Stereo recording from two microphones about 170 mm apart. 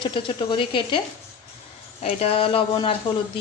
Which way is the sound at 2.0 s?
35° left (ahead or behind).